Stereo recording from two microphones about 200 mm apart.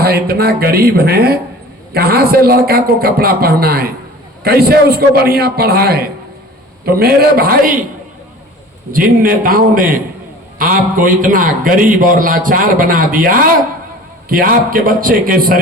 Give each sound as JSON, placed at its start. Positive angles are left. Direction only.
{"t": 0.0, "sound": "a man's voice", "side_deg": -50}
{"t": 8.9, "sound": "a man's voice", "side_deg": -45}